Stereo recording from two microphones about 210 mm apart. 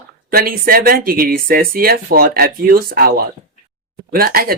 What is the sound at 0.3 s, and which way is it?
Speech, 45° right (ahead or behind).